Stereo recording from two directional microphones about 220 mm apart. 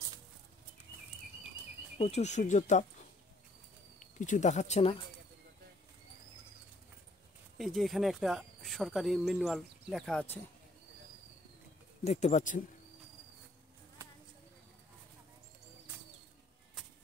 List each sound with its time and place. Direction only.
2.0 s speech: 30° left (ahead or behind)
4.0 s speech: 35° left (ahead or behind)
7.5 s speech: centre (ahead or behind)
12.0 s speech: 30° left (ahead or behind)